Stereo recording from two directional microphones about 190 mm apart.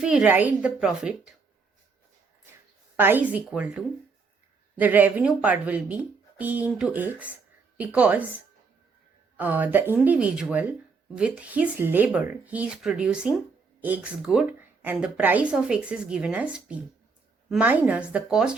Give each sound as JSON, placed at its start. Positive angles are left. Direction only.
{"t": 0.0, "sound": "a woman's voice", "side_deg": -5}
{"t": 2.9, "sound": "speech", "side_deg": -10}
{"t": 9.4, "sound": "a woman's voice", "side_deg": -10}